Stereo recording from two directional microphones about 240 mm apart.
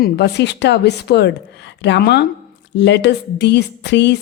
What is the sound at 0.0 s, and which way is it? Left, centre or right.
A woman's voice, left.